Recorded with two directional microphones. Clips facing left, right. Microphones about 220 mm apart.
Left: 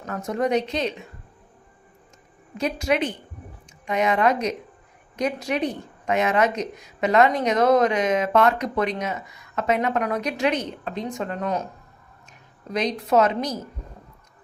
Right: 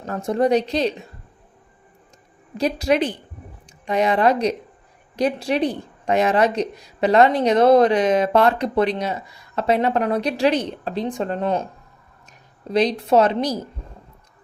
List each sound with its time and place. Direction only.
0.0 s speech: 30° right (ahead or behind)
2.6 s speech: 35° right (ahead or behind)
12.6 s speech: 30° right (ahead or behind)